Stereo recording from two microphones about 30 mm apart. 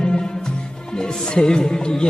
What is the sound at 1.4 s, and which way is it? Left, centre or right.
Music, left.